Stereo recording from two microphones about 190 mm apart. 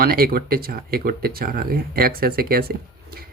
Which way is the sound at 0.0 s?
50° right (ahead or behind).